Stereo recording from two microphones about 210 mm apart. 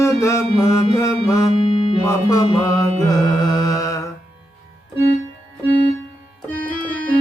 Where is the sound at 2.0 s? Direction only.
15° left (ahead or behind).